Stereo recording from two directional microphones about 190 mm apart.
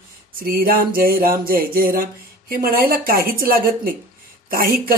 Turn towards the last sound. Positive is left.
turn(degrees=-50)  # may be behind; listen again after turning